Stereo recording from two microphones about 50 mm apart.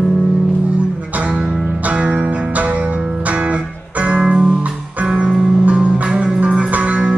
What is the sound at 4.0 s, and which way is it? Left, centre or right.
Music, right.